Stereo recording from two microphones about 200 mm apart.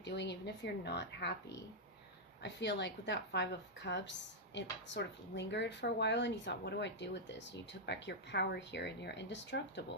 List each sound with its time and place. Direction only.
0.0 s speech: 60° left (ahead or behind)